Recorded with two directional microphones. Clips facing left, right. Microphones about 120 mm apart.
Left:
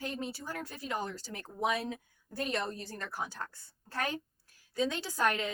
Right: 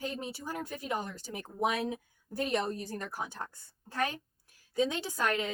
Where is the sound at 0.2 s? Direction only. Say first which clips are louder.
Right 1 dB; 15° right (ahead or behind).